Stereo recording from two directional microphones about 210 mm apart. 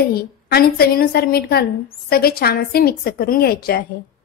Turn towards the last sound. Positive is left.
turn(degrees=45)  # may be behind; listen again after turning